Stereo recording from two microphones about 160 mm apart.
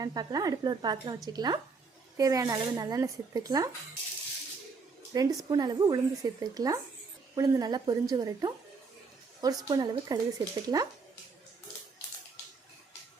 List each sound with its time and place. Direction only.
0.0 s speech: 25° right (ahead or behind)
5.1 s speech: 25° right (ahead or behind)